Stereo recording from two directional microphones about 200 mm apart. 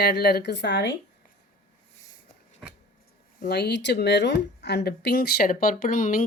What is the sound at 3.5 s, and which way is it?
Speech, 55° left (ahead or behind).